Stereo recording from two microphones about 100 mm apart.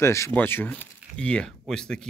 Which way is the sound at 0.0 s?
30° left (ahead or behind).